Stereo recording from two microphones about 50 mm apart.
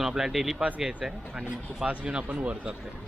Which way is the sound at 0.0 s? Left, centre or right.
Centre.